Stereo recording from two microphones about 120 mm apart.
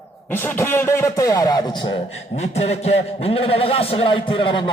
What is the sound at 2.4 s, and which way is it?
A man's voice, 60° left (ahead or behind).